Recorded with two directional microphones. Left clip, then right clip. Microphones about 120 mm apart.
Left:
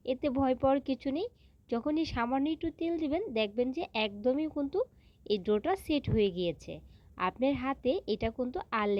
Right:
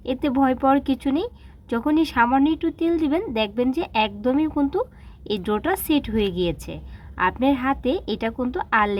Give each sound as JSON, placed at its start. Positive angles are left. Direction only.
{"t": 0.0, "sound": "a woman's voice", "side_deg": 25}